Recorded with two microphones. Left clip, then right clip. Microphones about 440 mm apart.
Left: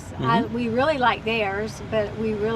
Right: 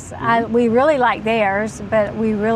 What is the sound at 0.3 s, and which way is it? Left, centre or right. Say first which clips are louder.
Speech: right 7 dB; right.